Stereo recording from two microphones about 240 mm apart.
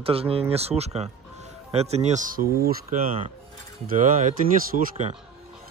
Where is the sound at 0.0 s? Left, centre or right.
Right.